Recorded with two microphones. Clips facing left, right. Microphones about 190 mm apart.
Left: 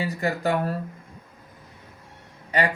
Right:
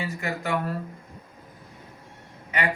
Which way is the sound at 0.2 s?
35° left (ahead or behind).